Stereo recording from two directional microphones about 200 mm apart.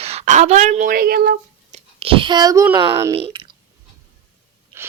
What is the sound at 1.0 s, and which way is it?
Speech, 50° right (ahead or behind).